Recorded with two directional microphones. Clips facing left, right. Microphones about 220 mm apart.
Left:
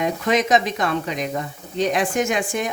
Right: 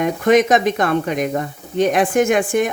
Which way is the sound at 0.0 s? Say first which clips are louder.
Right 6 dB; 55° right (ahead or behind).